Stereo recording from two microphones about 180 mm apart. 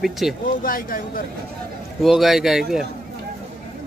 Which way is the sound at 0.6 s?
50° left (ahead or behind).